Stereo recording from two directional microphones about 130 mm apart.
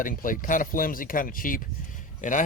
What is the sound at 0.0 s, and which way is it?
Speech, 90° left.